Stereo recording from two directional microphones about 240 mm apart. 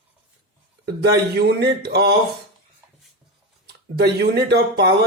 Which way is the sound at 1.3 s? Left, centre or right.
Right.